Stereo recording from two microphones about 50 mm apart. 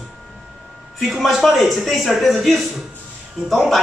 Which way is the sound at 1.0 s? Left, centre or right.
Centre.